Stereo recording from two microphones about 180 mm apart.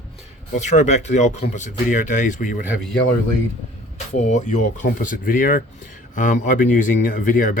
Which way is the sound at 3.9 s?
40° left (ahead or behind).